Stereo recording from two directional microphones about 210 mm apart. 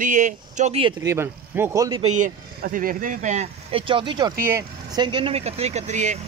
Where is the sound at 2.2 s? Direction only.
40° right (ahead or behind).